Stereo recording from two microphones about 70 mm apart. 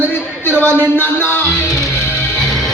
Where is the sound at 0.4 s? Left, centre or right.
Left.